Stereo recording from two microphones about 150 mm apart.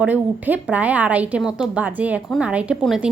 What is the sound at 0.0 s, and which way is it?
A woman's voice, 10° right (ahead or behind).